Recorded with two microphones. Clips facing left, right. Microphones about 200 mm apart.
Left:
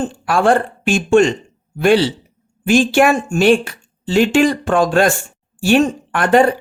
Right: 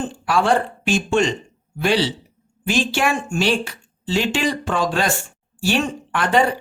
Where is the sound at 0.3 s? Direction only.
50° left (ahead or behind).